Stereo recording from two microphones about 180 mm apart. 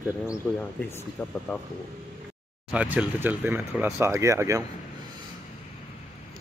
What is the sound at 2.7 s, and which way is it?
Speech, 5° right (ahead or behind).